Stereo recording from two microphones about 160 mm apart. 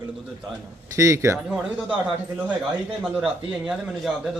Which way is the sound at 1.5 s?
5° right (ahead or behind).